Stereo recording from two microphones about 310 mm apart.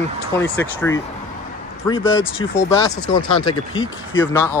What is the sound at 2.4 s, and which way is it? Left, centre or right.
Speech, centre.